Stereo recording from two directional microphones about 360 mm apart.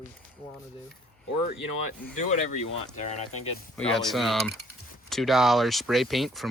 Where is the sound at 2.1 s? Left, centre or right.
Centre.